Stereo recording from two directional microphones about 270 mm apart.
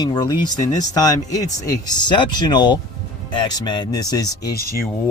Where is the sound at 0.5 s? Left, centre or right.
Left.